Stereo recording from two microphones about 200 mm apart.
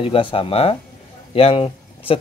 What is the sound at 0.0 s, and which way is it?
Speech, 25° left (ahead or behind).